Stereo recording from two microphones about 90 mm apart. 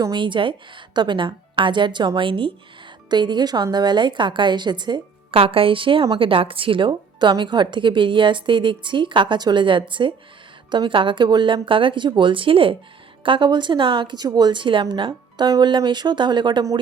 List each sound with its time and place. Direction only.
0.1 s speech: 65° right (ahead or behind)
3.1 s speech: 55° right (ahead or behind)
5.3 s a woman's voice: 90° right; by 6.1 s 75° right (ahead or behind)
6.1 s speech: 85° right
13.2 s speech: 65° right (ahead or behind)